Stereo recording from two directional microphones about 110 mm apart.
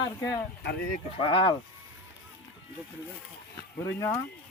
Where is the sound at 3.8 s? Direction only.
25° left (ahead or behind).